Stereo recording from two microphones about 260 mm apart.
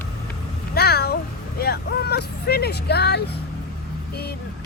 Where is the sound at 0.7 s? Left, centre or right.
Left.